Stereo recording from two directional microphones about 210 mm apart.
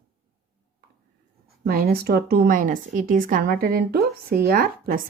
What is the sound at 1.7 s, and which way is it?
A woman's voice, 45° right (ahead or behind).